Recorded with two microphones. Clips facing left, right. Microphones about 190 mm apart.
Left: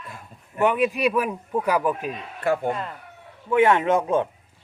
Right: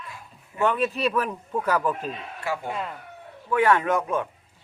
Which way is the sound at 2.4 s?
55° left (ahead or behind).